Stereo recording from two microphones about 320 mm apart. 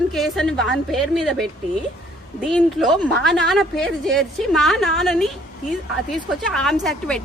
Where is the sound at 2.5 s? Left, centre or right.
Centre.